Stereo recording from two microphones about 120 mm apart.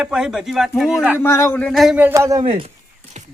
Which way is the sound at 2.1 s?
25° right (ahead or behind).